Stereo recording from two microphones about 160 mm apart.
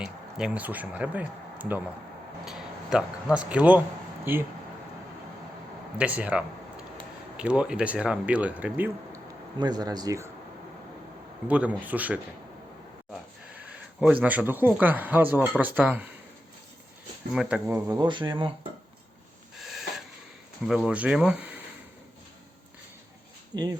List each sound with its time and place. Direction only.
0.0 s a man's voice: 5° right (ahead or behind)
6.0 s speech: 10° right (ahead or behind)
9.6 s speech: 25° right (ahead or behind)
11.4 s speech: 10° right (ahead or behind)
13.7 s speech: 10° right (ahead or behind)
17.3 s speech: 5° right (ahead or behind)
17.7 s speech: 20° right (ahead or behind)
19.5 s a sound: centre (ahead or behind)
20.7 s speech: 5° right (ahead or behind)
23.5 s speech: 25° right (ahead or behind)